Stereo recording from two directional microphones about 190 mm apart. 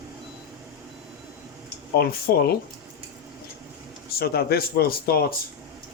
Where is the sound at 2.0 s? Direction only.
55° left (ahead or behind).